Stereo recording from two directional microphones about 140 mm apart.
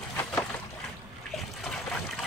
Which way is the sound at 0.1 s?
15° left (ahead or behind).